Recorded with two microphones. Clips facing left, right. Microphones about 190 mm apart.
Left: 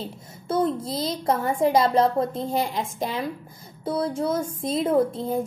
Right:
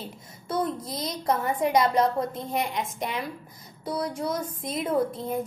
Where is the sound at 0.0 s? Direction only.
30° left (ahead or behind).